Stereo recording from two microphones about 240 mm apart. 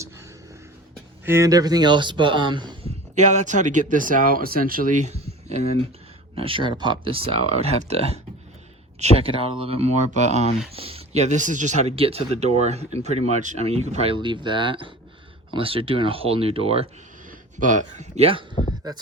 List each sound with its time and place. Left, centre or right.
1.2 s speech: centre
3.2 s speech: right